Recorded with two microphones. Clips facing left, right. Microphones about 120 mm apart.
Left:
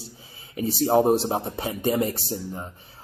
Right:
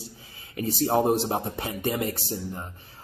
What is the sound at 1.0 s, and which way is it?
A man's voice, 20° left (ahead or behind).